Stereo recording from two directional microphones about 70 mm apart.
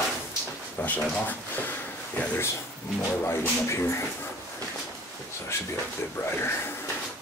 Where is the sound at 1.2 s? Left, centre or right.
Left.